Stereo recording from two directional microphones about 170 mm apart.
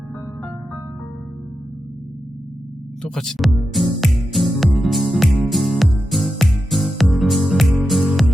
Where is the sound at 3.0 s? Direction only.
5° left (ahead or behind).